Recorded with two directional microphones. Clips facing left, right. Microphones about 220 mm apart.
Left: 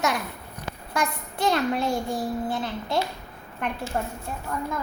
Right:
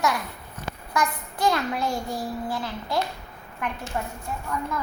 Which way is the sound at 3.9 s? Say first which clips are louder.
Left 2 dB; 40° left (ahead or behind).